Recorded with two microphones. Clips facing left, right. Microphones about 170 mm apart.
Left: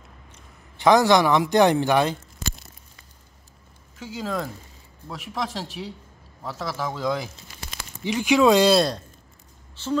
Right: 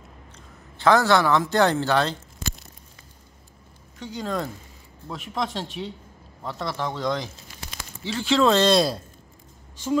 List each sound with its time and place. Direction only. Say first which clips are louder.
0.7 s a man's voice: left 2 dB; 15° left (ahead or behind)
4.0 s a man's voice: even; 5° left (ahead or behind)